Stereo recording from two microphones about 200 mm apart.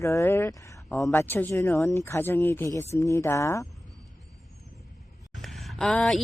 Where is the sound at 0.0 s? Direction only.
15° left (ahead or behind).